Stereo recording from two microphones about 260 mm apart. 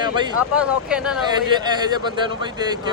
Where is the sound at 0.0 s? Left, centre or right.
Centre.